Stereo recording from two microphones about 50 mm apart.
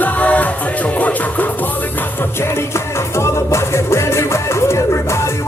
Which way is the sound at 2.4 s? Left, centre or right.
Left.